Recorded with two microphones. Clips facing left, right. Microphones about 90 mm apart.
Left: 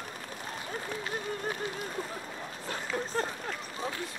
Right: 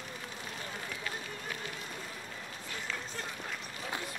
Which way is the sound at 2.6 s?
40° left (ahead or behind).